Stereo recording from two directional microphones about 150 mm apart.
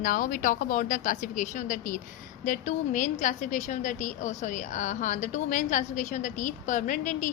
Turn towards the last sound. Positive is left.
turn(degrees=60)  # may be behind; listen again after turning